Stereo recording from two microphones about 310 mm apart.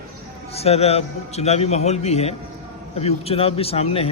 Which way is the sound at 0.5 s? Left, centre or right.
Centre.